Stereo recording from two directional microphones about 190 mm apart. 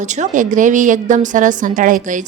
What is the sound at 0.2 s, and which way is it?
A woman's voice, 40° right (ahead or behind).